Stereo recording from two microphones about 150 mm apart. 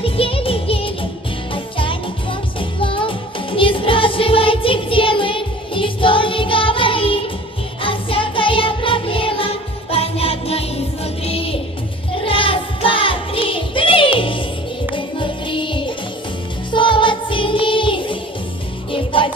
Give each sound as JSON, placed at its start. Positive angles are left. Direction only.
{"t": 0.0, "sound": "music", "side_deg": 40}